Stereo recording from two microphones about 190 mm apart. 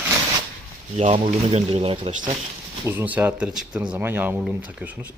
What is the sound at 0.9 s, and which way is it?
Speech, 35° right (ahead or behind).